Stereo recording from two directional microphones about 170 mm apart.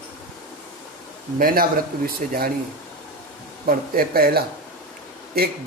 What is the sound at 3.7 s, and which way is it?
Music, 60° right (ahead or behind).